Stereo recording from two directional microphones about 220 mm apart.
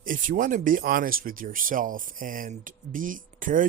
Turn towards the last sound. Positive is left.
turn(degrees=-35)  # may be behind; listen again after turning